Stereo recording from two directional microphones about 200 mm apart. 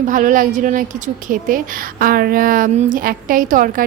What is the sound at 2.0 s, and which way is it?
A woman's voice, 45° right (ahead or behind).